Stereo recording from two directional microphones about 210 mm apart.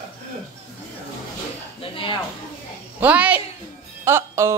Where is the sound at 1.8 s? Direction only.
25° left (ahead or behind).